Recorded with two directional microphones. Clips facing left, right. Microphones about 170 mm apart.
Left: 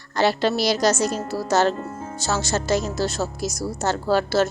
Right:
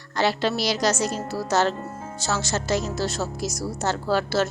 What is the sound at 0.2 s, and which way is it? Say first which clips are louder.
A woman's voice: left 3 dB; 45° left (ahead or behind).